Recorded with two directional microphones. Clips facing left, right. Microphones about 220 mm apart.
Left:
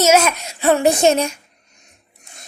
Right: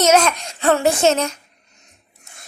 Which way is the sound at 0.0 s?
10° left (ahead or behind).